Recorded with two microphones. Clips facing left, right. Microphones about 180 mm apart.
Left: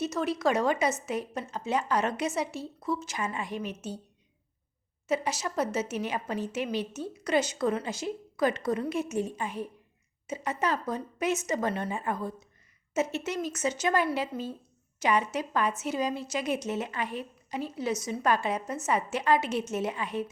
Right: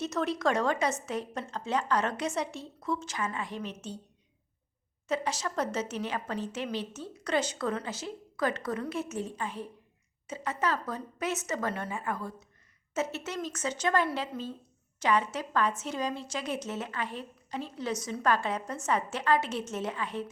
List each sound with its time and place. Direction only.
0.0 s a woman's voice: 5° left (ahead or behind)
5.0 s a woman's voice: 10° left (ahead or behind)